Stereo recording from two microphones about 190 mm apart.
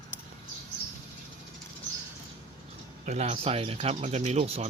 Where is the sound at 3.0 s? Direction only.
35° right (ahead or behind).